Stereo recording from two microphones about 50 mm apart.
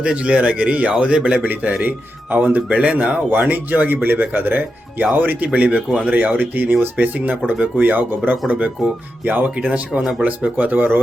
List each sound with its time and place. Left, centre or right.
0.0 s a man's voice: right
5.5 s speech: right
9.2 s speech: right
9.6 s a man's voice: right
10.0 s speech: centre
10.2 s a man's voice: right
10.7 s speech: right